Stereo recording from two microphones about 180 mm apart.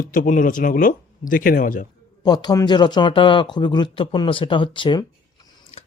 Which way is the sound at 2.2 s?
20° left (ahead or behind).